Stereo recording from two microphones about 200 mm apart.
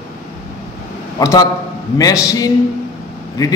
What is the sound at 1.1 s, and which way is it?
Speech, 15° left (ahead or behind).